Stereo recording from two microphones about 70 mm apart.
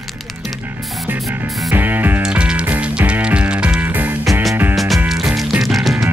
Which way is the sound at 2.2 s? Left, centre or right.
Centre.